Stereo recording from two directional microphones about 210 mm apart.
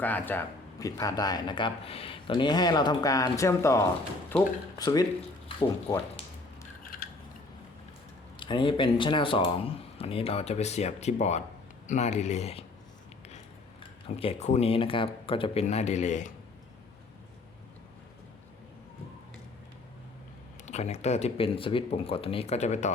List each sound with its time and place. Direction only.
0.0 s speech: 10° left (ahead or behind)
8.4 s speech: 25° left (ahead or behind)
20.7 s speech: 30° left (ahead or behind)